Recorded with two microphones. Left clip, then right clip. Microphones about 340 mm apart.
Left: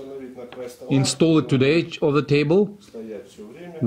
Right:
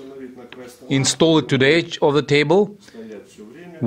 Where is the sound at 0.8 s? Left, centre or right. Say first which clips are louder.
Right 3 dB; centre.